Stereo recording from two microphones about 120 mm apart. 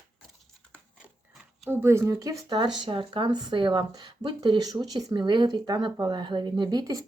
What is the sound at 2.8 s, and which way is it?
Speech, 45° right (ahead or behind).